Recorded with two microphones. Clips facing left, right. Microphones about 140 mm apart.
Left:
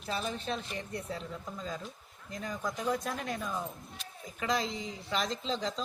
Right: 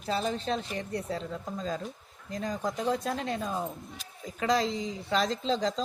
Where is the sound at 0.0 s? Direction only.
40° right (ahead or behind).